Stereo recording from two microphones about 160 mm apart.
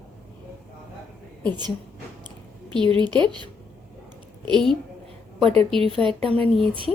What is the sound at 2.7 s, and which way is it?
Speech, 30° right (ahead or behind).